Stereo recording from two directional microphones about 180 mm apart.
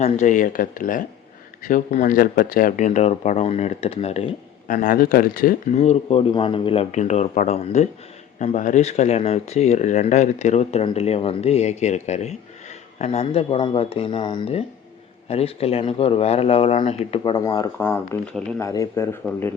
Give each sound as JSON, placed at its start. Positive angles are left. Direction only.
{"t": 0.0, "sound": "speech", "side_deg": 45}
{"t": 4.7, "sound": "speech", "side_deg": 50}